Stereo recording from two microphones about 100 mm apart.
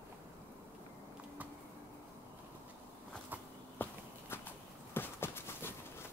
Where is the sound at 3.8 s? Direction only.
20° left (ahead or behind).